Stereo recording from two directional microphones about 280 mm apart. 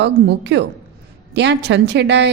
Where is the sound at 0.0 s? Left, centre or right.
Right.